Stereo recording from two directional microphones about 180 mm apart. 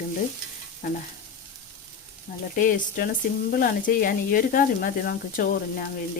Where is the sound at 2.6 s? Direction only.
50° left (ahead or behind).